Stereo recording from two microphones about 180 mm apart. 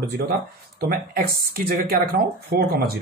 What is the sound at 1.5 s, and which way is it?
Speech, 55° right (ahead or behind).